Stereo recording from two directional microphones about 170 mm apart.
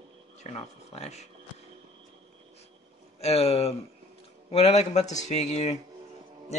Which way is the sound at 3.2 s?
40° left (ahead or behind).